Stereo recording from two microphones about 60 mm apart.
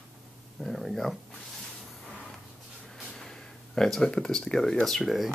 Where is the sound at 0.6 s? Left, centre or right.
Centre.